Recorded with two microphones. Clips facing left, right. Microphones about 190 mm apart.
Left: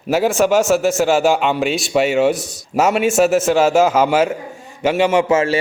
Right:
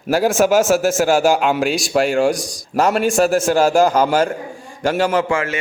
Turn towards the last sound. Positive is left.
turn(degrees=25)  # may be behind; listen again after turning